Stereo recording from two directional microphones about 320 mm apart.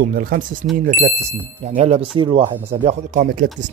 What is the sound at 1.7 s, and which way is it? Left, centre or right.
Speech, centre.